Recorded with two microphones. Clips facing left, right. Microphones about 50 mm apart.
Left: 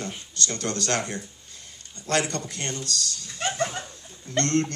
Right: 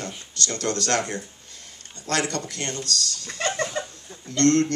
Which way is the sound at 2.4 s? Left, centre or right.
Right.